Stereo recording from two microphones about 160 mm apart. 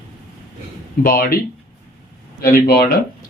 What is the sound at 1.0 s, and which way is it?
Speech, 65° left (ahead or behind).